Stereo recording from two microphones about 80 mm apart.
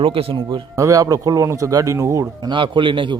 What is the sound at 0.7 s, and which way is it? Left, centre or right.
A man's voice, right.